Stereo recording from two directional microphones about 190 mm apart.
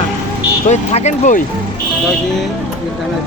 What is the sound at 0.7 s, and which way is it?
Speech, 35° left (ahead or behind).